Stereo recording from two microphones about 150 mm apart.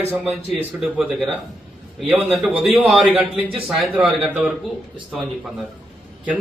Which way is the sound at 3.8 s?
5° right (ahead or behind).